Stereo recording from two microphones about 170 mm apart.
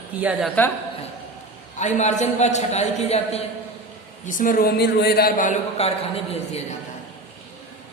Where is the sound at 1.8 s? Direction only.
45° left (ahead or behind).